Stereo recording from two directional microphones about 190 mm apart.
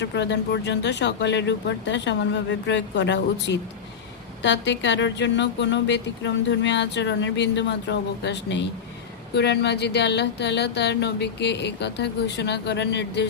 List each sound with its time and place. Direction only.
0.0 s a woman's voice: 65° left (ahead or behind)